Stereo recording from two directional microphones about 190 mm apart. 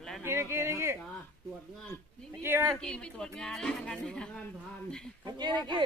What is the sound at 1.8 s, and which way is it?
Speech, 15° left (ahead or behind).